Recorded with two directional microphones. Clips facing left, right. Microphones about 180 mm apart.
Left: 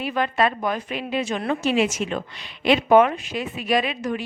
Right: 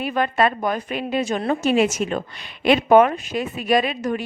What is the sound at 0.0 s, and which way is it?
A woman's voice, 50° right (ahead or behind).